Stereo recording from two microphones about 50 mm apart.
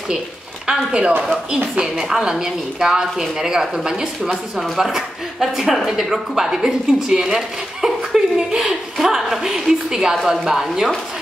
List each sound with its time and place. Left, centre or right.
0.7 s a woman's voice: centre
8.4 s a sound: centre
9.0 s speech: centre